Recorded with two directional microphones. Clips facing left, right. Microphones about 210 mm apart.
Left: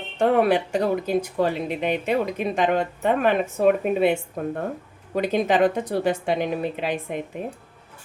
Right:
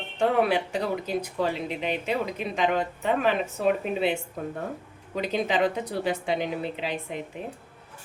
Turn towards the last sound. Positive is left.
turn(degrees=50)  # may be behind; listen again after turning